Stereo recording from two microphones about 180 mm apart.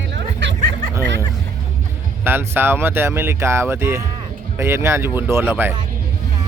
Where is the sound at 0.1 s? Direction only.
90° right.